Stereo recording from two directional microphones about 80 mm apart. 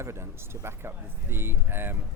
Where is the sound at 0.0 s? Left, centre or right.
Right.